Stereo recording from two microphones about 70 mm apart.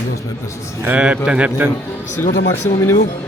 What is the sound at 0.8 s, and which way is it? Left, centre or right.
Speech, centre.